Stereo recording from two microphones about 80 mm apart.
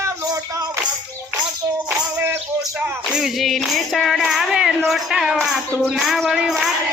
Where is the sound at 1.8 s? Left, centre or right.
Right.